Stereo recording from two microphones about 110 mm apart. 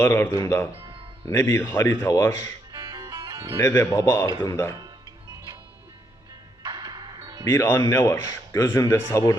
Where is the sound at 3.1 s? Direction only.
40° right (ahead or behind).